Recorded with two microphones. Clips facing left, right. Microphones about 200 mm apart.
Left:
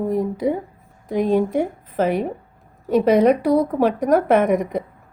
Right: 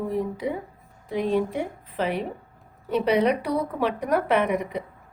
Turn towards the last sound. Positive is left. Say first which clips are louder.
# left 6 dB
turn(degrees=45)  # may be behind; listen again after turning